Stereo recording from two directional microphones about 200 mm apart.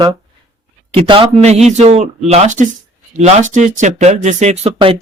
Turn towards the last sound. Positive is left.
turn(degrees=-30)  # may be behind; listen again after turning